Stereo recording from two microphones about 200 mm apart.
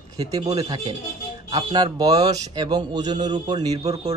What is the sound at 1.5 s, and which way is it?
A man's voice, 20° right (ahead or behind).